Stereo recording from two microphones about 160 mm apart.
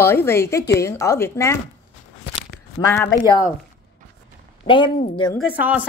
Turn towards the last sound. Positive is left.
turn(degrees=-10)  # may be behind; listen again after turning